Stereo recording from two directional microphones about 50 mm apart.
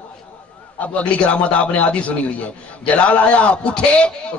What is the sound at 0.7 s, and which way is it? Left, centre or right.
A man's voice, left.